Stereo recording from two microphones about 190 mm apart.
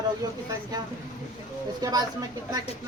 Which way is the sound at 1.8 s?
20° right (ahead or behind).